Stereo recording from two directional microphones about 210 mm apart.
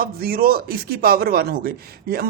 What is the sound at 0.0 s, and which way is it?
Speech, 45° right (ahead or behind).